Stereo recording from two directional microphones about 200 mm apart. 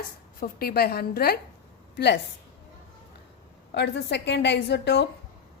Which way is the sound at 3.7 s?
60° left (ahead or behind).